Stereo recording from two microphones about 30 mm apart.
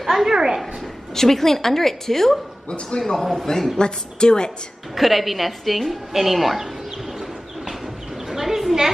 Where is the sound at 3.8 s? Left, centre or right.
Left.